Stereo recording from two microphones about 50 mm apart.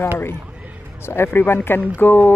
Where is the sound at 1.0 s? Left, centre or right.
Left.